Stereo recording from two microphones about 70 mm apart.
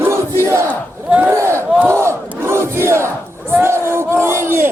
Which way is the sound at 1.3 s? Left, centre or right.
Right.